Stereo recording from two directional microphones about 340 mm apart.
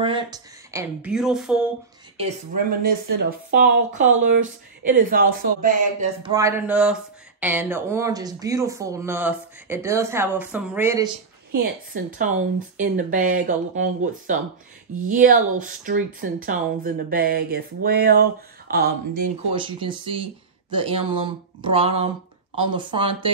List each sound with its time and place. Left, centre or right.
0.0 s a woman's voice: centre
2.1 s speech: right
6.3 s speech: centre
11.9 s speech: right
19.5 s speech: centre